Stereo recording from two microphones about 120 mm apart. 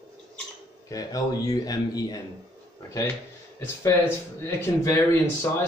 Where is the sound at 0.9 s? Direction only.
30° left (ahead or behind).